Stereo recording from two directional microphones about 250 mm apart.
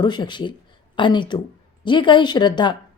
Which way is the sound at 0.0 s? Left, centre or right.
Centre.